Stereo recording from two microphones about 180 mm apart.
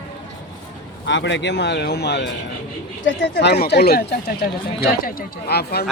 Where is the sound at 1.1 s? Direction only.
90° left; by 5.8 s 60° left (ahead or behind).